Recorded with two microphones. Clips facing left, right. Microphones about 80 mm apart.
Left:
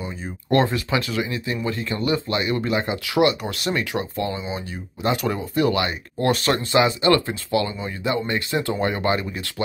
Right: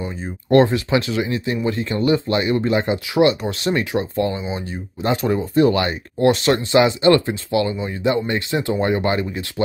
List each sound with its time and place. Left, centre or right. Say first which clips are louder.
0.5 s speech: right 5 dB; right